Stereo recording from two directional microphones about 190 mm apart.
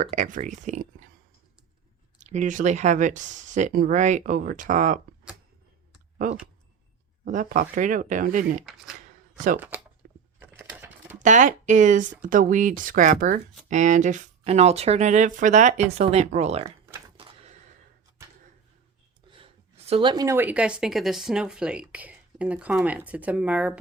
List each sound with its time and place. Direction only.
0.0 s speech: 40° right (ahead or behind)
2.1 s speech: 40° right (ahead or behind)
7.3 s speech: 45° right (ahead or behind)
9.6 s a woman's voice: 10° right (ahead or behind)
10.4 s a sound: 10° right (ahead or behind)
11.2 s speech: 40° right (ahead or behind)
17.2 s a sound: 35° right (ahead or behind)
19.3 s a woman's voice: 30° right (ahead or behind); by 23.8 s 5° right (ahead or behind)